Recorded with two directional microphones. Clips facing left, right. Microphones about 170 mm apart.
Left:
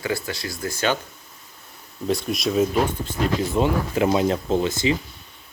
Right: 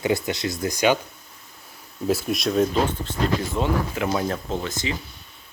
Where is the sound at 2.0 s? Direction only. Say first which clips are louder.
Even; 5° right (ahead or behind).